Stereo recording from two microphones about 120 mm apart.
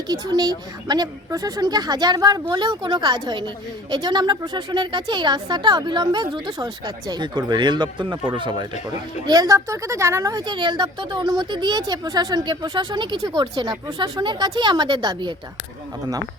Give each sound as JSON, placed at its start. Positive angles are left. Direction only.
{"t": 0.1, "sound": "a woman's voice", "side_deg": -35}